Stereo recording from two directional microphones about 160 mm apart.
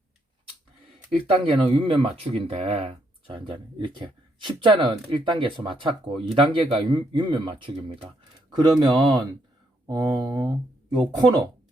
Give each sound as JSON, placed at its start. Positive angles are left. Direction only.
{"t": 1.5, "sound": "speech", "side_deg": -35}